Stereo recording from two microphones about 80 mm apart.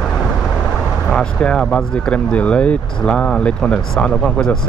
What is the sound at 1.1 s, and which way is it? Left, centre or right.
Speech, centre.